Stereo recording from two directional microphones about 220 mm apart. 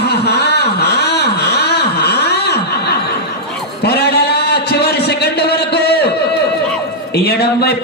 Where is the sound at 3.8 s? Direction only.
50° left (ahead or behind).